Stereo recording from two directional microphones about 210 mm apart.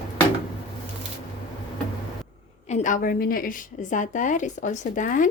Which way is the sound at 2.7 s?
35° left (ahead or behind).